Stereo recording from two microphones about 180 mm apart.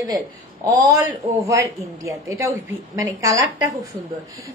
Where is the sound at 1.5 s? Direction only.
15° right (ahead or behind).